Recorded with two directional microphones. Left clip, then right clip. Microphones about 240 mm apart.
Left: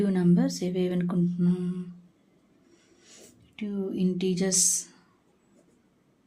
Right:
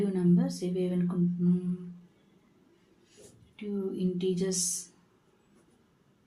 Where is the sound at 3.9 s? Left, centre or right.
Left.